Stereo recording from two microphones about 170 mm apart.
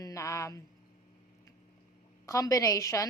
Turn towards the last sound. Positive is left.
turn(degrees=20)  # may be behind; listen again after turning